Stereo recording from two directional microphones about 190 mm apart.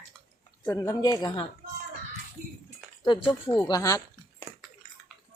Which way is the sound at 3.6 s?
20° left (ahead or behind).